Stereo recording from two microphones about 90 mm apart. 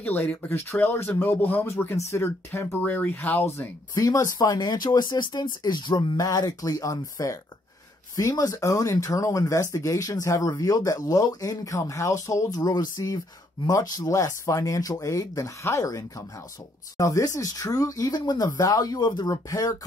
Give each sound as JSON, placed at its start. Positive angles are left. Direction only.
{"t": 0.0, "sound": "speech", "side_deg": 20}
{"t": 3.9, "sound": "speech", "side_deg": 40}
{"t": 4.4, "sound": "speech", "side_deg": 50}
{"t": 19.5, "sound": "speech", "side_deg": 40}